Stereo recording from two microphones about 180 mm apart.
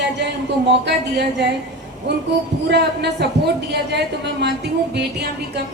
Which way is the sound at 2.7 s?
65° right (ahead or behind).